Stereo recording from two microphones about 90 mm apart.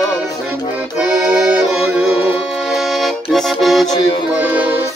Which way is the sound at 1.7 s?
5° right (ahead or behind).